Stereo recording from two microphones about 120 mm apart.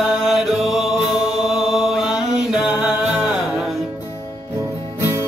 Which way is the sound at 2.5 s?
5° right (ahead or behind).